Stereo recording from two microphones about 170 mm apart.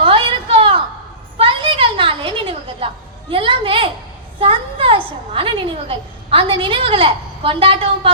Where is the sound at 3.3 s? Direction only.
30° right (ahead or behind).